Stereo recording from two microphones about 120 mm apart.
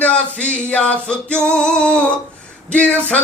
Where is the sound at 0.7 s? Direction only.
10° left (ahead or behind).